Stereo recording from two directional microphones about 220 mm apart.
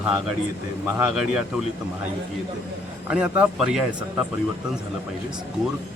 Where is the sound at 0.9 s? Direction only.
5° right (ahead or behind).